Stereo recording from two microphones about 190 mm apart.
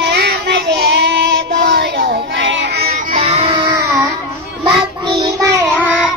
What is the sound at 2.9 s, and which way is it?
Music, 40° right (ahead or behind).